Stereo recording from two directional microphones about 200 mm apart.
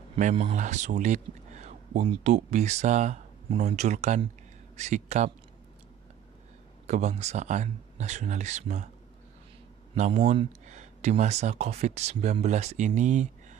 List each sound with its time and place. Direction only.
0.1 s speech: 35° right (ahead or behind)
6.9 s speech: 35° right (ahead or behind)
9.9 s speech: 35° right (ahead or behind)